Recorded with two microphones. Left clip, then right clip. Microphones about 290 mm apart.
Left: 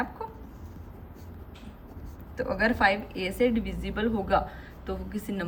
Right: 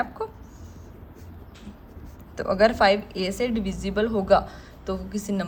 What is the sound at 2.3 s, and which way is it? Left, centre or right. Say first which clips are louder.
A woman's voice: right 7 dB; centre.